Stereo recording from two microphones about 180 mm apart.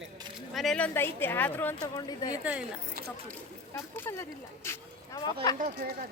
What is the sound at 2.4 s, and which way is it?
Speech, 5° right (ahead or behind).